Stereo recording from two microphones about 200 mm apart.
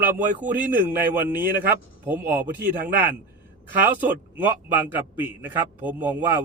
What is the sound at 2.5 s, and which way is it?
Speech, 50° right (ahead or behind).